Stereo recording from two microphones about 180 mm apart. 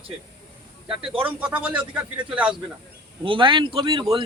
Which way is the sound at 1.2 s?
10° right (ahead or behind).